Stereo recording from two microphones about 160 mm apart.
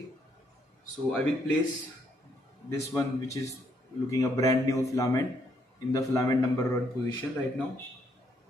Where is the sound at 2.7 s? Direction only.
15° left (ahead or behind).